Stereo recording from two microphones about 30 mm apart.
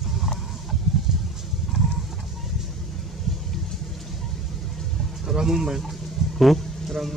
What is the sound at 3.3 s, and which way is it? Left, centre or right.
Vehicle, centre.